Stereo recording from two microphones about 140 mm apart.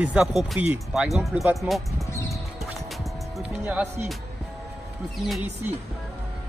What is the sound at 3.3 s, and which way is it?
Speech, 10° right (ahead or behind).